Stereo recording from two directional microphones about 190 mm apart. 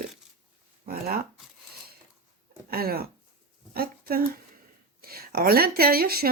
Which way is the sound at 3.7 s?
50° right (ahead or behind).